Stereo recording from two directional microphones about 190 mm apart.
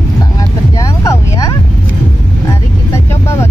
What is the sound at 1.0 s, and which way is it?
Vehicle, 15° left (ahead or behind).